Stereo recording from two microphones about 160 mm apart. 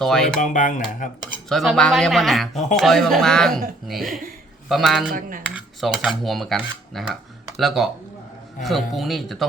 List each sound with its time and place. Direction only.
0.0 s speech: 5° left (ahead or behind)
0.3 s speech: 50° left (ahead or behind)
1.5 s speech: centre (ahead or behind)
5.5 s cutlery: 5° right (ahead or behind)
8.6 s speech: centre (ahead or behind)